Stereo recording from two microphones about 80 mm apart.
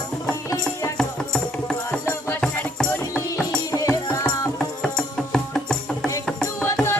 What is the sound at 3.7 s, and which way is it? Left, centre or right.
Music, left.